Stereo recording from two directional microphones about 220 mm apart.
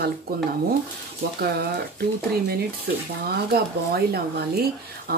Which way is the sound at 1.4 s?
45° right (ahead or behind).